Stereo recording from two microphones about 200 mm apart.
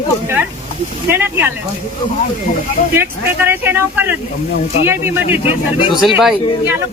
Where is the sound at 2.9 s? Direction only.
10° right (ahead or behind).